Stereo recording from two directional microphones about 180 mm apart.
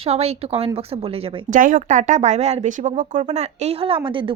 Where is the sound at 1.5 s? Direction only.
45° right (ahead or behind).